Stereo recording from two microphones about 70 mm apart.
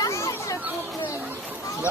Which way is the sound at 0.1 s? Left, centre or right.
Left.